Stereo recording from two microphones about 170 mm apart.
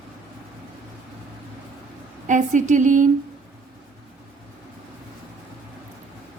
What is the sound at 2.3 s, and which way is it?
Speech, 45° right (ahead or behind).